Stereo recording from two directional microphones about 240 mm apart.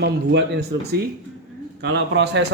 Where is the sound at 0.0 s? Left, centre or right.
Right.